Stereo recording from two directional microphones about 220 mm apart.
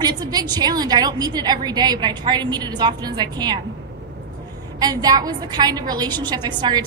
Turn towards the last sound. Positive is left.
turn(degrees=-20)  # may be behind; listen again after turning